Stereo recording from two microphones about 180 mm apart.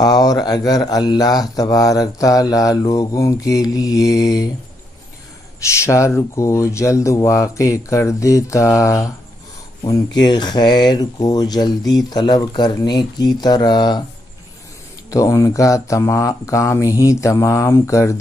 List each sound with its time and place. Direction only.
0.0 s speech: 20° left (ahead or behind)
5.8 s speech: 15° left (ahead or behind)
15.0 s speech: 20° left (ahead or behind)